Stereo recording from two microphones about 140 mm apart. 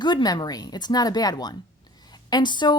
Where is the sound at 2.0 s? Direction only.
30° left (ahead or behind).